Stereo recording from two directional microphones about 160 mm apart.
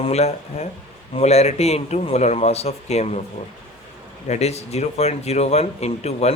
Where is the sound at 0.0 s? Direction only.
40° left (ahead or behind).